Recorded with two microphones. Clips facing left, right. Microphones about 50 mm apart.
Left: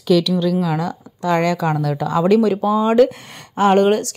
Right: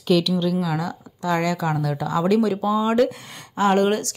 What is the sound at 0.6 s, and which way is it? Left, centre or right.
Speech, left.